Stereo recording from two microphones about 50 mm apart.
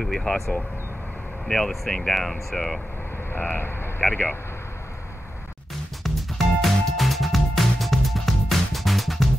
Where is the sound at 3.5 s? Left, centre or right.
Left.